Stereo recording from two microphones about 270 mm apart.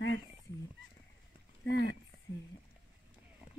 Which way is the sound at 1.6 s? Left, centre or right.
Left.